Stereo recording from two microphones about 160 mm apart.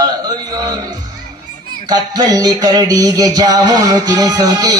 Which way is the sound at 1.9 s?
25° right (ahead or behind).